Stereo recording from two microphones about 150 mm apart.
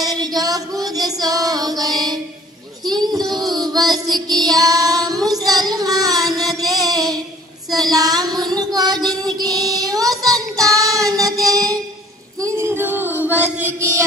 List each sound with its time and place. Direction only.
0.0 s female singing: 25° right (ahead or behind)
2.8 s child singing: 25° right (ahead or behind)
6.3 s music: 25° right (ahead or behind)
7.7 s child singing: 25° right (ahead or behind)
12.4 s a sound: 20° right (ahead or behind)